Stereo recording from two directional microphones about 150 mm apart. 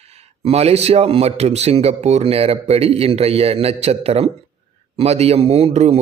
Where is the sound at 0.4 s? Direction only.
45° right (ahead or behind).